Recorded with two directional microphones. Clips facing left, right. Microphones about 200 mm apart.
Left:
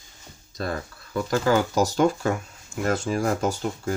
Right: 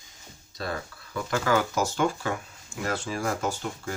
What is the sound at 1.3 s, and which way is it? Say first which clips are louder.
Speech: left 4 dB; 30° left (ahead or behind).